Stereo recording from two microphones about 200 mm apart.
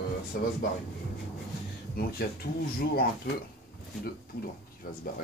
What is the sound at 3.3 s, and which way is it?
Speech, 50° left (ahead or behind).